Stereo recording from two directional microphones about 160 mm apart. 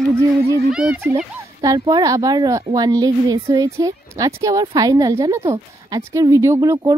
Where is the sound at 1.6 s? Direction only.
25° right (ahead or behind).